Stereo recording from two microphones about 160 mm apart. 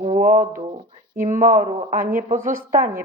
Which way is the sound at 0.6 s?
30° right (ahead or behind).